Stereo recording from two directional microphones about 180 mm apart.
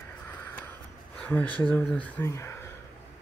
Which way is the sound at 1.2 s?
10° left (ahead or behind).